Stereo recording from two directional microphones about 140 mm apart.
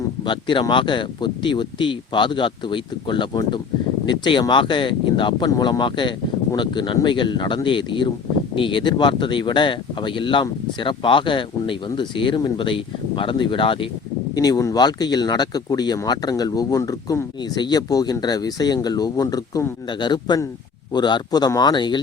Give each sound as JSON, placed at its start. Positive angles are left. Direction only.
{"t": 0.3, "sound": "speech", "side_deg": 35}
{"t": 14.3, "sound": "speech", "side_deg": 25}